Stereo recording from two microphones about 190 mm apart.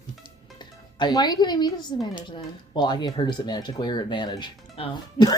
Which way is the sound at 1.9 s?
25° left (ahead or behind).